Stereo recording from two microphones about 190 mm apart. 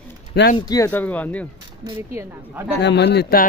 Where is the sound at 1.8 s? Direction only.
20° right (ahead or behind).